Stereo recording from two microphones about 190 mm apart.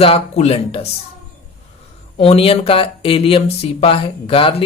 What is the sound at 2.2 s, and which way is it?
Speech, 30° left (ahead or behind).